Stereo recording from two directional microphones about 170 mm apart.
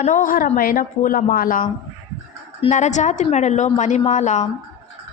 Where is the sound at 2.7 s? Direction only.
45° left (ahead or behind).